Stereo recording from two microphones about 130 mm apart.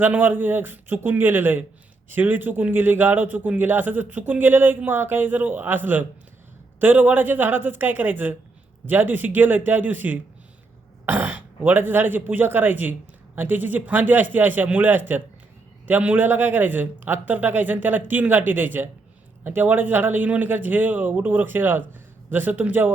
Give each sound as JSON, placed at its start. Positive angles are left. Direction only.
{"t": 0.0, "sound": "speech", "side_deg": -15}